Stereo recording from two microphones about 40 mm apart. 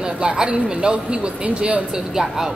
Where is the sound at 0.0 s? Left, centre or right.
Centre.